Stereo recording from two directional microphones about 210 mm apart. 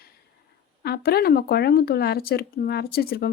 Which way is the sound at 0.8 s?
50° left (ahead or behind).